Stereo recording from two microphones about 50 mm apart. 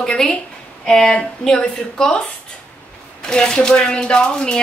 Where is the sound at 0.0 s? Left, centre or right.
Centre.